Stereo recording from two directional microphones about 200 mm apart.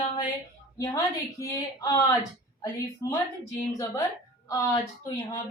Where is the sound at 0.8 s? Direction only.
15° left (ahead or behind).